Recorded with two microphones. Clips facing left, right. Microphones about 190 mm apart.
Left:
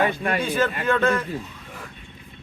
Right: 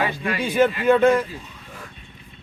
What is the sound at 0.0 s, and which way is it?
Speech, 50° left (ahead or behind).